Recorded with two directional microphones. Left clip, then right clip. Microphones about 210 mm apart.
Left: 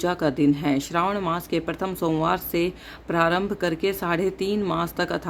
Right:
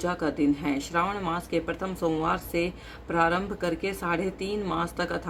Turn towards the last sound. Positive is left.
turn(degrees=45)  # may be behind; listen again after turning